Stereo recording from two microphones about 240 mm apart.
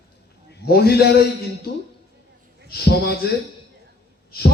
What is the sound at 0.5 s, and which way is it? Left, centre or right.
Speech, left.